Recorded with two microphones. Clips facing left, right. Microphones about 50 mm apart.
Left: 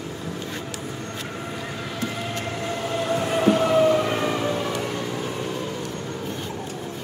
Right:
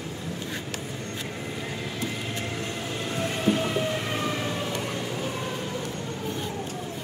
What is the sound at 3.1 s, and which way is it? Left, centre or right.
Train, left.